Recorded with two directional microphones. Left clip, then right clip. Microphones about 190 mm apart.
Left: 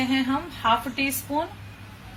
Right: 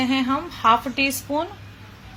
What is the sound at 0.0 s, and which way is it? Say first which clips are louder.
A woman's voice: right 3 dB; 50° right (ahead or behind).